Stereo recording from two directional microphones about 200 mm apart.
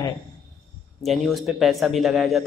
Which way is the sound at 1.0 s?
Centre (ahead or behind).